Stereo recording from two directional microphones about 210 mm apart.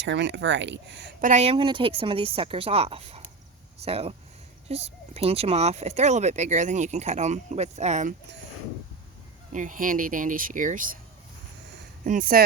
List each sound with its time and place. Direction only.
0.0 s speech: 55° right (ahead or behind)
1.2 s a woman's voice: 35° right (ahead or behind)
9.5 s speech: 40° right (ahead or behind)
12.0 s speech: 40° right (ahead or behind)